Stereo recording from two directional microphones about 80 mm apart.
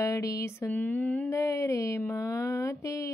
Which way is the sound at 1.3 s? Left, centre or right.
Left.